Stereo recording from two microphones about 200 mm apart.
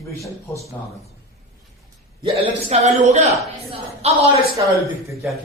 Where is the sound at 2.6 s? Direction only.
35° right (ahead or behind).